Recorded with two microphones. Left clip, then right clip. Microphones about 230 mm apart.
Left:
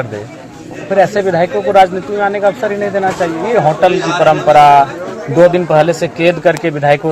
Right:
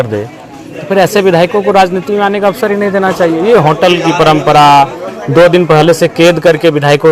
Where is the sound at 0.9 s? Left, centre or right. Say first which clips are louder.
Right 3 dB; right.